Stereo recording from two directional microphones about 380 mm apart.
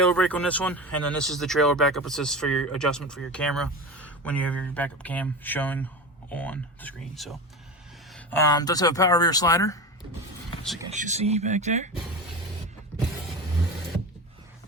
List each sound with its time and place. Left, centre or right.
0.0 s speech: centre
10.9 s speech: centre